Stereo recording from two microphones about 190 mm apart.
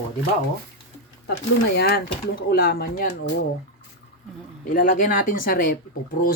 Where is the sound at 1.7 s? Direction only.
55° left (ahead or behind).